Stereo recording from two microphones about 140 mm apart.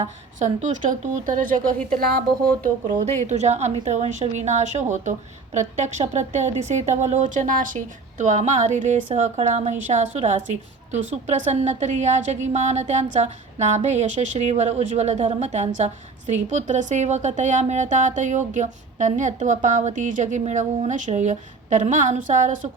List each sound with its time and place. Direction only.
0.0 s speech: 60° right (ahead or behind); by 2.2 s 90° right
2.6 s a woman's voice: 65° right (ahead or behind)
8.2 s a woman's voice: 60° right (ahead or behind)